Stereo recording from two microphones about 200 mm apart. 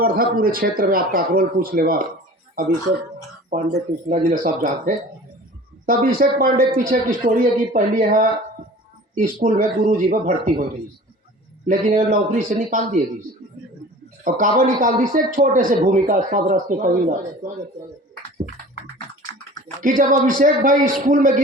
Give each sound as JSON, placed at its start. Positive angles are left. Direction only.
{"t": 0.0, "sound": "speech", "side_deg": -45}
{"t": 3.5, "sound": "speech", "side_deg": -45}
{"t": 5.8, "sound": "a man's voice", "side_deg": -45}
{"t": 14.3, "sound": "a man's voice", "side_deg": -40}
{"t": 19.8, "sound": "a man's voice", "side_deg": -40}